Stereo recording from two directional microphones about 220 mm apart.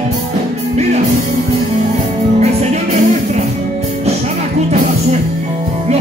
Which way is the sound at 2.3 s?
30° right (ahead or behind).